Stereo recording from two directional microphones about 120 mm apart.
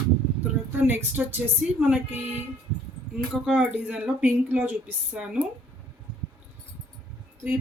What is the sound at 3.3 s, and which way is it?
Speech, 5° right (ahead or behind).